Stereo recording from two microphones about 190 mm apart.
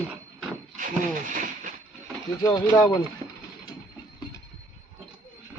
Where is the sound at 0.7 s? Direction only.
45° right (ahead or behind).